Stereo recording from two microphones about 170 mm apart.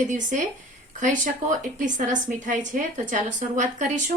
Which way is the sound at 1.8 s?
50° right (ahead or behind).